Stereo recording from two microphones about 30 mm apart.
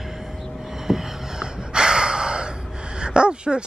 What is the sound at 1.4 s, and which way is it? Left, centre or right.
Gasp, right.